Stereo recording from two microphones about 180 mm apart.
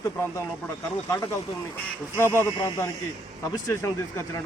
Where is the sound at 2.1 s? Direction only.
15° left (ahead or behind).